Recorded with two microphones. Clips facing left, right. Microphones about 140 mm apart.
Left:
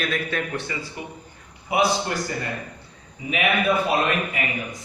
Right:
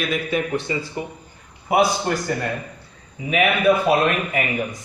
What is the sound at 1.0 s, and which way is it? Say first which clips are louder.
Speech: right 6 dB; 35° right (ahead or behind).